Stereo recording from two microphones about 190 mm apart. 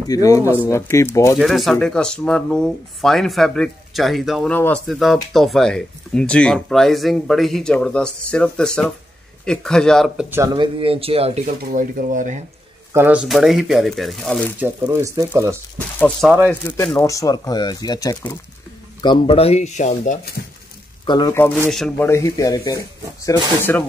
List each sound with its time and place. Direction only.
0.1 s speech: 15° left (ahead or behind)
1.4 s speech: centre (ahead or behind)
10.3 s speech: 20° right (ahead or behind)
11.7 s speech: 45° right (ahead or behind)
12.9 s speech: 10° right (ahead or behind)
14.6 s speech: 15° right (ahead or behind)
16.4 s speech: 10° left (ahead or behind); by 20.2 s 40° left (ahead or behind)
21.0 s a sound: 25° left (ahead or behind)
21.3 s speech: 10° left (ahead or behind)